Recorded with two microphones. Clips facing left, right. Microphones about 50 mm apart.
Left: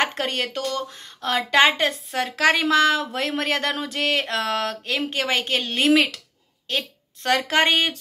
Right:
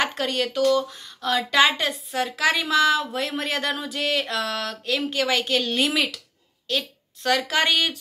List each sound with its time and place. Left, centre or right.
0.0 s a woman's voice: left